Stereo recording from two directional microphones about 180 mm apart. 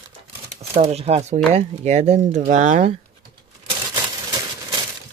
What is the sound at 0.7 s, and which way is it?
Speech, 35° right (ahead or behind).